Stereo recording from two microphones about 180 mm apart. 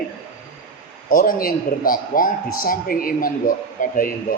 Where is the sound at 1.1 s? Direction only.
50° left (ahead or behind).